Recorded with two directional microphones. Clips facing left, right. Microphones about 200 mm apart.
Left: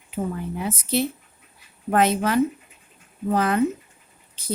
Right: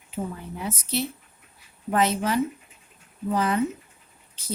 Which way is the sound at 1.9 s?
55° left (ahead or behind).